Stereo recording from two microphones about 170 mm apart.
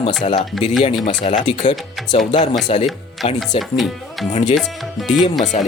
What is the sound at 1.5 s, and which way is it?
Speech, 40° left (ahead or behind).